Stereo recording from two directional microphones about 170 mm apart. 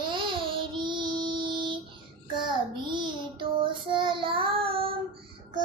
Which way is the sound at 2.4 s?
25° right (ahead or behind).